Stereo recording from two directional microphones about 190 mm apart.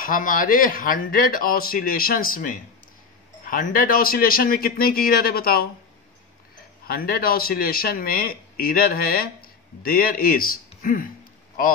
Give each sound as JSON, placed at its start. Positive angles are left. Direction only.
{"t": 0.0, "sound": "speech", "side_deg": 45}
{"t": 6.9, "sound": "speech", "side_deg": 50}